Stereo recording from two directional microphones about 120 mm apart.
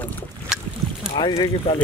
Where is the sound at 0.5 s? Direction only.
5° right (ahead or behind).